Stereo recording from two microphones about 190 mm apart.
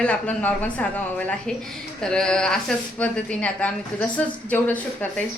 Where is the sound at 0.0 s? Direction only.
5° left (ahead or behind).